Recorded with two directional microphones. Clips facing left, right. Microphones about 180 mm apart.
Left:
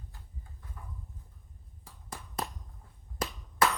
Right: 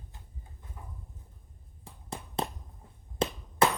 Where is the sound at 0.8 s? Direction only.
20° right (ahead or behind).